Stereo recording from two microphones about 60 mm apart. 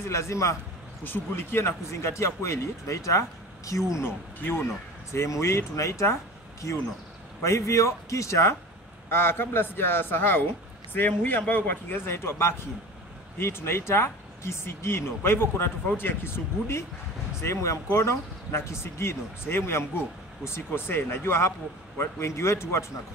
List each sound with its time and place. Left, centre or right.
0.0 s speech: left
1.0 s speech: left
4.0 s a man's voice: left
5.1 s speech: left
9.1 s a man's voice: left